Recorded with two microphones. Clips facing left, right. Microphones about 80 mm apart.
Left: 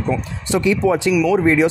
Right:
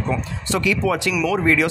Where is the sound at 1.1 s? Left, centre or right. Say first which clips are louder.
Left 5 dB; centre.